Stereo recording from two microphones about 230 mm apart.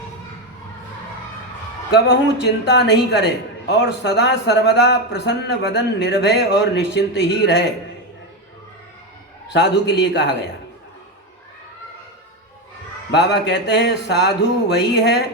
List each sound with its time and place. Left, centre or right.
2.6 s a man's voice: left
9.5 s a man's voice: left
13.1 s a man's voice: left